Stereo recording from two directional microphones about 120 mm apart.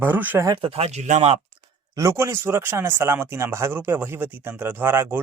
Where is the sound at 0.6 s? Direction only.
60° right (ahead or behind); by 1.4 s 75° right (ahead or behind).